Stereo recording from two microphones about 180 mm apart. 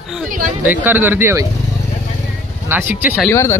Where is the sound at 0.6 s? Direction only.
10° right (ahead or behind).